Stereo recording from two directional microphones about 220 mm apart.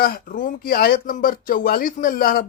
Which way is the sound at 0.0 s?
40° left (ahead or behind).